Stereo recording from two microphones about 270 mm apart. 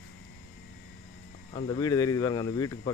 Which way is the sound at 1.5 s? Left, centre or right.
Centre.